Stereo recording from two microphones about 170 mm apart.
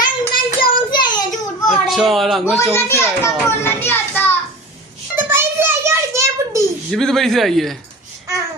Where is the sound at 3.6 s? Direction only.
15° left (ahead or behind).